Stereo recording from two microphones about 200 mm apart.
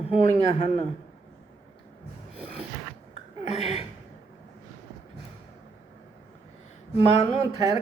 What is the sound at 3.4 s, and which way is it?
Speech, 30° left (ahead or behind).